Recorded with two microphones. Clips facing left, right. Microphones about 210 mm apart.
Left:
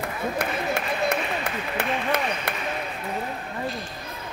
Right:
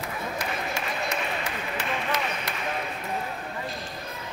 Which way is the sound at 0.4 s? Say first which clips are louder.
Left 6 dB; 60° left (ahead or behind).